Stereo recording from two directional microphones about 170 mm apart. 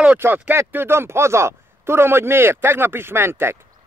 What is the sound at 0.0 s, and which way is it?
Speech, 10° right (ahead or behind).